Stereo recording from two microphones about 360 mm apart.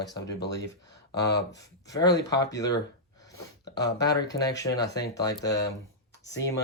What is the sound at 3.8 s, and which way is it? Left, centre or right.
Speech, left.